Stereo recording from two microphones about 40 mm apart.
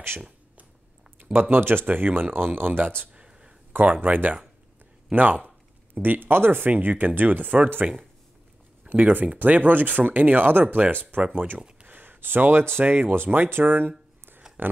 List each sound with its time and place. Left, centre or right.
1.2 s speech: right
3.3 s a sound: right
3.8 s speech: right
5.9 s speech: right
6.7 s speech: right
8.9 s speech: right
12.8 s speech: right
13.7 s a sound: right